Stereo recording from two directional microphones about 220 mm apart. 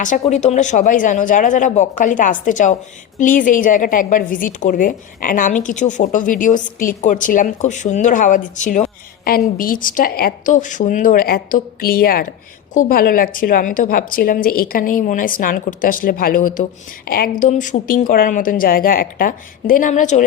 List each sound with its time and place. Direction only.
0.0 s a woman's voice: 35° left (ahead or behind)